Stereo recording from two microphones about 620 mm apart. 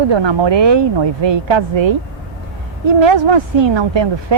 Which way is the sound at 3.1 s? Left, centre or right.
Right.